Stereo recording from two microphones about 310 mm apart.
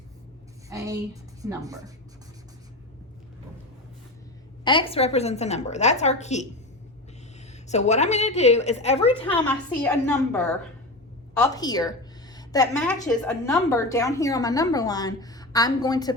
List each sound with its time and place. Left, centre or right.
0.7 s a woman's voice: centre
4.6 s a woman's voice: centre
7.7 s a woman's voice: left
9.3 s a woman's voice: centre